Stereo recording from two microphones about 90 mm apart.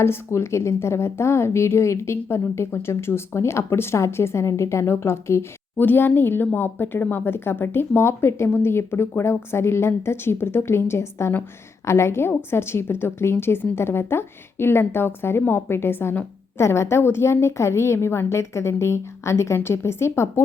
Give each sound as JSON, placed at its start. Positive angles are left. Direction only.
{"t": 0.0, "sound": "a woman's voice", "side_deg": 30}